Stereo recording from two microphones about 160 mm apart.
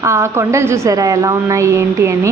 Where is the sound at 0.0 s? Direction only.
15° right (ahead or behind).